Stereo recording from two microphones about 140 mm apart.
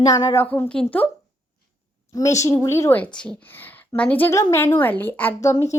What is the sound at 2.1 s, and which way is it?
A woman's voice, 25° left (ahead or behind).